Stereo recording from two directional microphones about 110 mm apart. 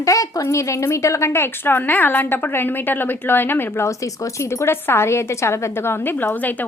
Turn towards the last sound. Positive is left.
turn(degrees=15)  # may be behind; listen again after turning